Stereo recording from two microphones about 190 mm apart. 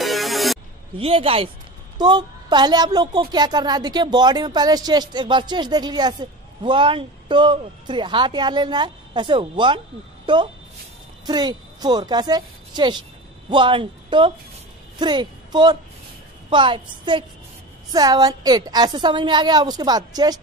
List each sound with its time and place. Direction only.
0.0 s music: centre (ahead or behind)
0.9 s a woman's voice: 30° right (ahead or behind)